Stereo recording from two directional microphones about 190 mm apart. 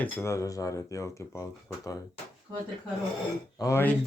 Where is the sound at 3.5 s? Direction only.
15° left (ahead or behind).